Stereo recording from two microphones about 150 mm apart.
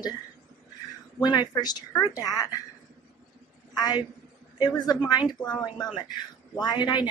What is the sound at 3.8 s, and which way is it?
A woman's voice, 25° left (ahead or behind).